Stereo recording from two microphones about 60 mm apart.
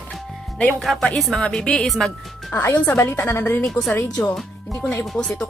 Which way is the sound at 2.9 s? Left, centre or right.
Left.